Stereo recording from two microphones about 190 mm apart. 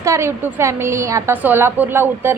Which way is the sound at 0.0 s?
15° right (ahead or behind).